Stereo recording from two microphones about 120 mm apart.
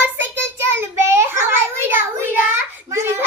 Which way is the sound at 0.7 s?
20° right (ahead or behind).